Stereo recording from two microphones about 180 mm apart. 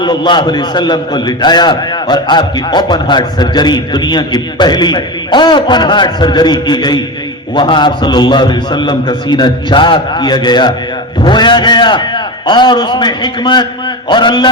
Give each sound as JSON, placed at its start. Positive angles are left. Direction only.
{"t": 0.0, "sound": "a man's voice", "side_deg": 25}